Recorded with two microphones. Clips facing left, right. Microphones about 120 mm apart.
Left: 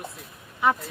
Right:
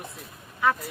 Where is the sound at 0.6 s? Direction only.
20° left (ahead or behind).